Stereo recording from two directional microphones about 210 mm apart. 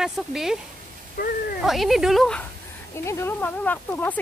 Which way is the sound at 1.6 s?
Centre (ahead or behind).